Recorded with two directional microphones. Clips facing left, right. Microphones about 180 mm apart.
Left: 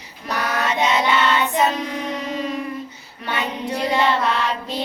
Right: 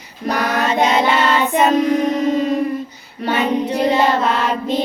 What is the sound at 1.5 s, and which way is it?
Child singing, 50° right (ahead or behind).